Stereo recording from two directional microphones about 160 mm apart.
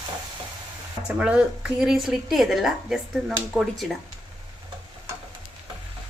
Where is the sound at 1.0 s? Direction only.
10° right (ahead or behind).